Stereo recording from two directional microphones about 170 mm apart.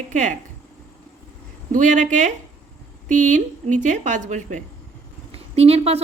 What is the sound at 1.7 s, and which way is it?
A woman's voice, 45° right (ahead or behind).